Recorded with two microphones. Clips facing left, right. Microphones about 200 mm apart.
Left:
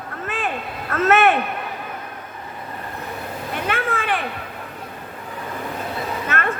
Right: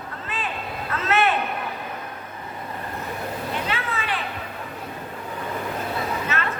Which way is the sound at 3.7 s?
50° left (ahead or behind).